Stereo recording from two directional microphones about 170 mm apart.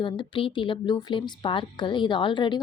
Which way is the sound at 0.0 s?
30° left (ahead or behind).